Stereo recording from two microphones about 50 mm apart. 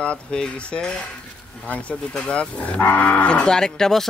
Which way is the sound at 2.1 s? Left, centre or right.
Left.